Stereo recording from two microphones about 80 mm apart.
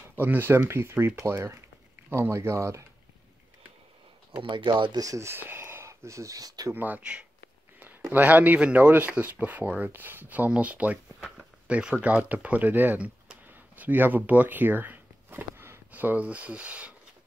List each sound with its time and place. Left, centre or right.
0.1 s speech: right
4.4 s speech: right
4.9 s speech: right
5.3 s speech: right
6.7 s speech: right
11.1 s a sound: centre
11.7 s speech: centre